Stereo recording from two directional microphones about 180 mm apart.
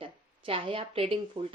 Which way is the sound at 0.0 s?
30° right (ahead or behind).